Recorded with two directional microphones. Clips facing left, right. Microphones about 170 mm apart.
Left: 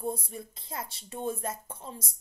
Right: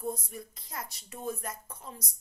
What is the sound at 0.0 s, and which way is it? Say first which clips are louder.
A woman's voice: left 2 dB; 30° left (ahead or behind).